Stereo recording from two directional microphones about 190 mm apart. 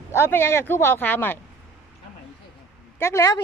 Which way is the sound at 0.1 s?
10° left (ahead or behind).